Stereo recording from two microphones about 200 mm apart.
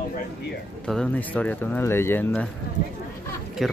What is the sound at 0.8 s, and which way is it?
Speech, 5° left (ahead or behind).